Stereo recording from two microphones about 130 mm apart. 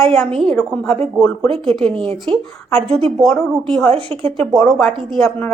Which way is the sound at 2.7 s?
50° right (ahead or behind).